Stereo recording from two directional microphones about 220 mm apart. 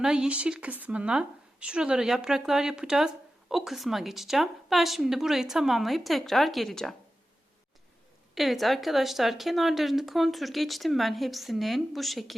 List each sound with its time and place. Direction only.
0.0 s speech: 5° right (ahead or behind)
8.4 s speech: centre (ahead or behind)